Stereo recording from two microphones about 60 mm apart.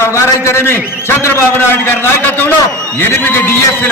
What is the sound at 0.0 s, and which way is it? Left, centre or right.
A man's voice, left.